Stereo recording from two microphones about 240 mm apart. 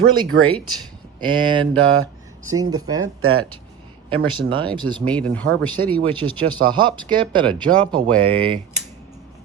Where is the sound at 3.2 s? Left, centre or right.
Right.